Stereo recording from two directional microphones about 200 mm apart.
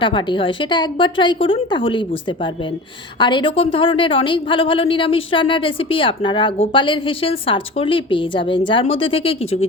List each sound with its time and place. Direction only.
0.0 s a woman's voice: 25° left (ahead or behind)